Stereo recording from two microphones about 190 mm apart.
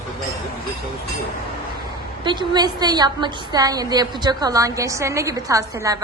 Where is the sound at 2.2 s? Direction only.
25° right (ahead or behind).